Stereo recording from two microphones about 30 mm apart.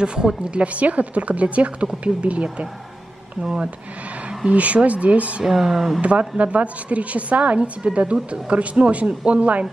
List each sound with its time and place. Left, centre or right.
0.0 s speech: right
0.7 s a woman's voice: right
4.5 s a woman's voice: right
5.4 s speech: centre
5.9 s a woman's voice: right